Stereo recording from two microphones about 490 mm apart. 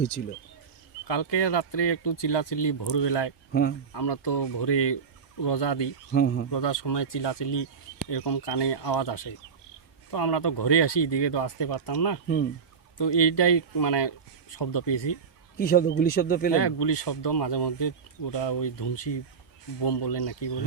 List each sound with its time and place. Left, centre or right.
1.0 s speech: left
3.5 s speech: centre
3.9 s speech: left
6.1 s speech: left
6.5 s speech: left
15.5 s speech: centre
16.6 s speech: left